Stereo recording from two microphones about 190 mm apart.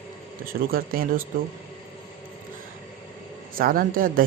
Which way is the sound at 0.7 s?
50° right (ahead or behind).